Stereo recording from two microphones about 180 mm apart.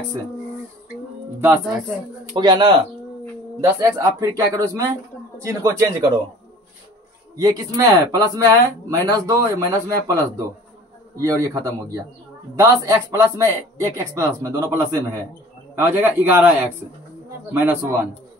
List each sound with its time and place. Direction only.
2.3 s speech: 25° right (ahead or behind)
7.3 s speech: 20° right (ahead or behind)